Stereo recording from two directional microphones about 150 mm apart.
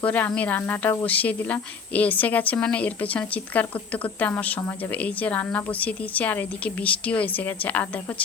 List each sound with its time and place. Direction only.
0.0 s speech: 10° left (ahead or behind)